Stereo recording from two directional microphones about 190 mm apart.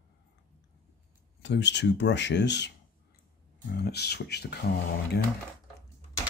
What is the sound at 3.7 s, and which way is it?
Speech, 55° left (ahead or behind).